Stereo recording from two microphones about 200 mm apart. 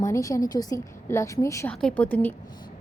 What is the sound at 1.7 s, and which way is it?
Speech, 5° left (ahead or behind).